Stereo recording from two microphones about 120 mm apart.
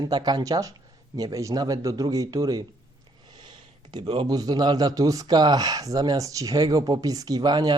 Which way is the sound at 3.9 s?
40° right (ahead or behind).